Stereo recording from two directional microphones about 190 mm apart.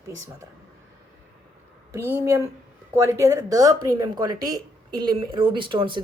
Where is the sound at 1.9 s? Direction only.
10° right (ahead or behind).